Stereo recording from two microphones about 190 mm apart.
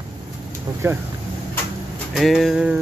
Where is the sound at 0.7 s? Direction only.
15° right (ahead or behind).